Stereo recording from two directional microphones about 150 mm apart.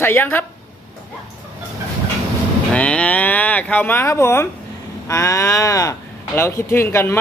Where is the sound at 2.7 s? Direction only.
10° left (ahead or behind).